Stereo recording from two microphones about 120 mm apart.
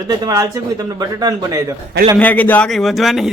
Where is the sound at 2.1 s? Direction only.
15° left (ahead or behind).